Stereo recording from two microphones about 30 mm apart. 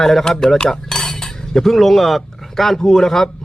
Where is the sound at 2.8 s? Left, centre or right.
Centre.